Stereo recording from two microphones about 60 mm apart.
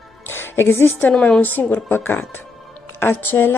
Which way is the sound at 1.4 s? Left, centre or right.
Left.